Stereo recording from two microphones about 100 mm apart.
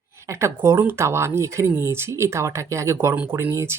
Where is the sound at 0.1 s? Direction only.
30° right (ahead or behind).